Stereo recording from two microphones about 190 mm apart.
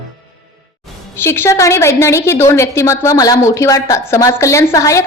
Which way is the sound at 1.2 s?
15° left (ahead or behind).